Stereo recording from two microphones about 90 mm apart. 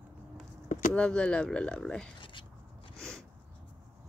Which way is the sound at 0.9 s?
10° left (ahead or behind).